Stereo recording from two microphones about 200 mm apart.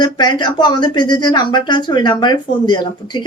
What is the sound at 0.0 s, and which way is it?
Speech, 20° left (ahead or behind).